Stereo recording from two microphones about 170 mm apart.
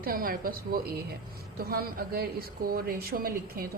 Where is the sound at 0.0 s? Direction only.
60° right (ahead or behind).